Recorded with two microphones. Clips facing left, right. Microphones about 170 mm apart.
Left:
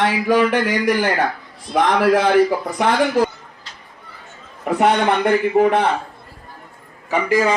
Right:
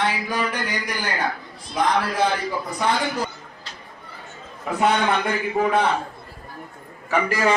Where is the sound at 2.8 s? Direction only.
90° left.